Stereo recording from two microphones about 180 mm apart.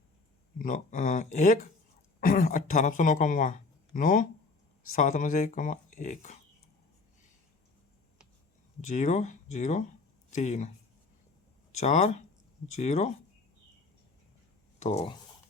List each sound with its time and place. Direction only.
0.6 s speech: 45° left (ahead or behind)
8.9 s speech: 45° left (ahead or behind)
11.8 s speech: 40° left (ahead or behind)
14.8 s speech: 35° left (ahead or behind)